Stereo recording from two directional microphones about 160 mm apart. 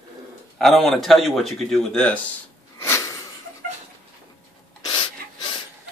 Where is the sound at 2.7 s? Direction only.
15° left (ahead or behind).